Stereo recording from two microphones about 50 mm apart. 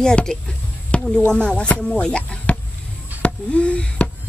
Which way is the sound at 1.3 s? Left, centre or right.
Centre.